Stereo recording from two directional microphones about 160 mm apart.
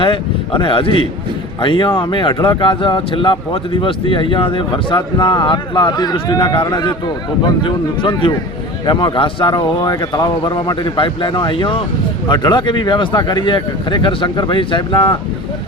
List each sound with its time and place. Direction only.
0.0 s speech: 30° left (ahead or behind)